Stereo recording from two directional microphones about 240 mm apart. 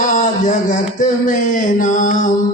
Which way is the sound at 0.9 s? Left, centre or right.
Left.